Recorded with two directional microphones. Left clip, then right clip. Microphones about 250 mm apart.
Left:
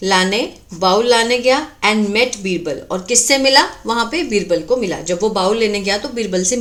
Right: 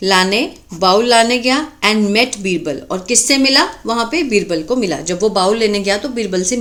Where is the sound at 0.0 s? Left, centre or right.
Centre.